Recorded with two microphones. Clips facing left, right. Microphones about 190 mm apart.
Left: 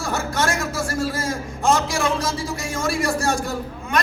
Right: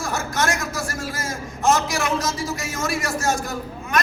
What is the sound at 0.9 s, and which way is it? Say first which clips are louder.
A man's voice: left 5 dB; 30° left (ahead or behind).